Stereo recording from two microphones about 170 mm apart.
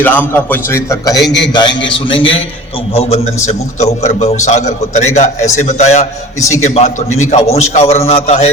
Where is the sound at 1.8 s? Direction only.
30° left (ahead or behind).